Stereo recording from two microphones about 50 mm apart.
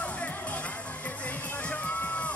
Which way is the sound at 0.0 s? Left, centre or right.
Left.